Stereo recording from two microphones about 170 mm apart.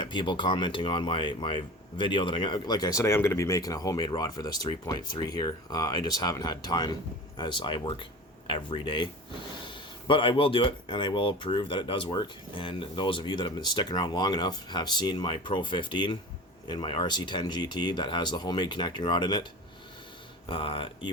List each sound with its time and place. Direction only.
0.0 s speech: 25° left (ahead or behind)
20.5 s speech: 30° left (ahead or behind)